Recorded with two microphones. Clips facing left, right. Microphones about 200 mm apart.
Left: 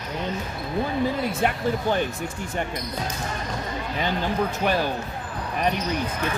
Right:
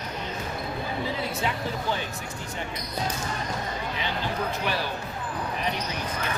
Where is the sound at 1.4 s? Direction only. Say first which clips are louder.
Left 6 dB; 55° left (ahead or behind).